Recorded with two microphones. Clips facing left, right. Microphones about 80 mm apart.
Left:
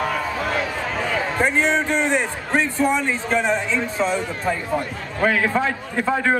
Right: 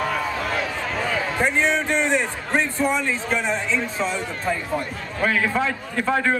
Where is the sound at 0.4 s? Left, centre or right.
Centre.